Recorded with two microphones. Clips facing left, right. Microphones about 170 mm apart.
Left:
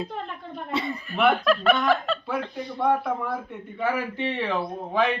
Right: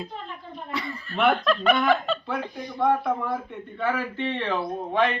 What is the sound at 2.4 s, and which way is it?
Speech, 15° right (ahead or behind).